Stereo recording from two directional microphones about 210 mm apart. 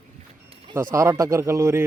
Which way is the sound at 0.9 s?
15° right (ahead or behind).